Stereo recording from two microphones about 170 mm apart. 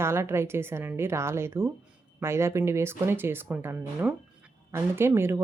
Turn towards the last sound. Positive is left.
turn(degrees=-15)  # may be behind; listen again after turning